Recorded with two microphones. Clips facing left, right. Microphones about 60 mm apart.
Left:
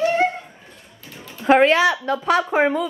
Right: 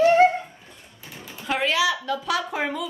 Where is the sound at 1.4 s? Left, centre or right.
Left.